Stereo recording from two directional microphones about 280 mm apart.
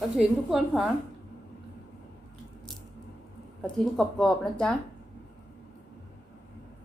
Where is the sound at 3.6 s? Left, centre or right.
Centre.